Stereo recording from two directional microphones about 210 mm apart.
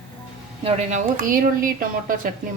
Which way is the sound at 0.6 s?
30° right (ahead or behind).